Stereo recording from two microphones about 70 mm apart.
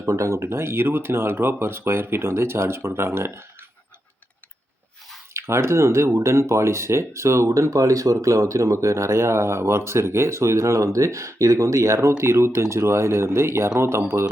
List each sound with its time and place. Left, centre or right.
0.0 s speech: right
5.3 s speech: right